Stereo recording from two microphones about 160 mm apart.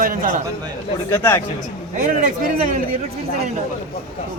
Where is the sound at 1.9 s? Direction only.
55° right (ahead or behind).